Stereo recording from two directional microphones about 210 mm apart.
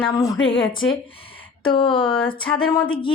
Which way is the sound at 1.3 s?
25° left (ahead or behind).